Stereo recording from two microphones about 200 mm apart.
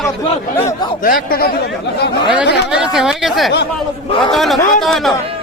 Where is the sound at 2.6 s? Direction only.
5° right (ahead or behind).